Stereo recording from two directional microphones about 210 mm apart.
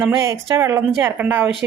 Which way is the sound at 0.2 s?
15° right (ahead or behind).